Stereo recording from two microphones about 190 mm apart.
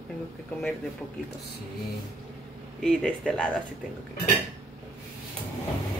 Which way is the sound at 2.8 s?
5° left (ahead or behind).